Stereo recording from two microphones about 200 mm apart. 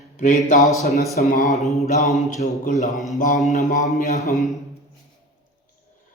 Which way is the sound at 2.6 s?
40° left (ahead or behind).